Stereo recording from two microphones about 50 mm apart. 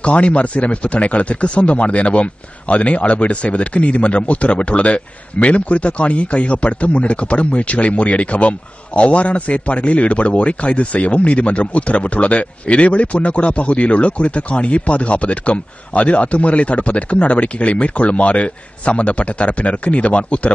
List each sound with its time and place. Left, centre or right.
0.0 s speech: left